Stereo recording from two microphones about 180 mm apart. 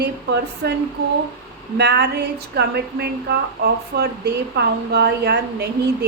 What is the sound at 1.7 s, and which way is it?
Speech, 70° right (ahead or behind).